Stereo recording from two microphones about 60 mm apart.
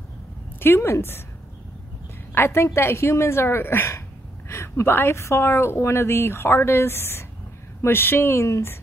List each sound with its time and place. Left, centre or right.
0.6 s speech: left
2.3 s a woman's voice: left
8.5 s a woman's voice: left